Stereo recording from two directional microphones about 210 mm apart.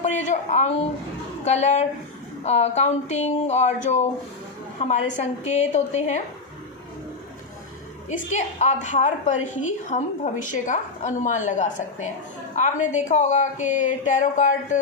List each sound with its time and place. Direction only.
0.0 s a sound: 35° left (ahead or behind)
1.5 s a woman's voice: 35° left (ahead or behind)
8.1 s a woman's voice: 35° left (ahead or behind)